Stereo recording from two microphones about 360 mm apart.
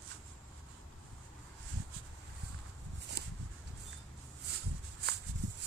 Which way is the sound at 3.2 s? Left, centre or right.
Right.